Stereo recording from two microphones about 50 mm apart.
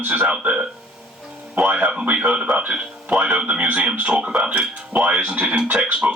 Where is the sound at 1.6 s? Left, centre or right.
Right.